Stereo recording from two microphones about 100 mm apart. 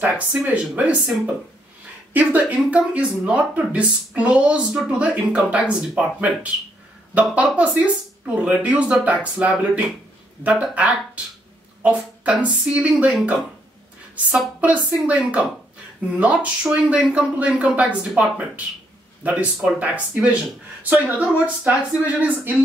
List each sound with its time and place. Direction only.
0.0 s speech: 15° right (ahead or behind)
19.2 s speech: 15° right (ahead or behind)